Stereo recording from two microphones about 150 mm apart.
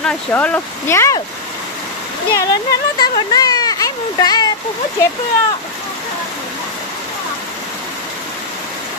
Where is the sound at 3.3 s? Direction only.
25° left (ahead or behind).